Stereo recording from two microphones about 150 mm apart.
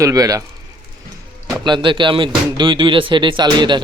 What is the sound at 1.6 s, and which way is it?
Speech, 30° right (ahead or behind).